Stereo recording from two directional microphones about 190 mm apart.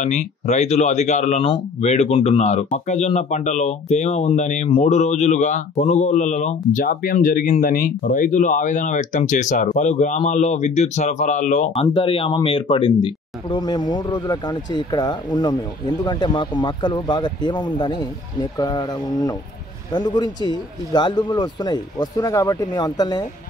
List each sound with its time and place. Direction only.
0.0 s speech: 40° left (ahead or behind); by 23.2 s 20° left (ahead or behind)